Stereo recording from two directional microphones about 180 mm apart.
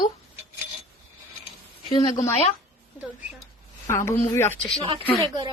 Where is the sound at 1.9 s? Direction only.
25° left (ahead or behind).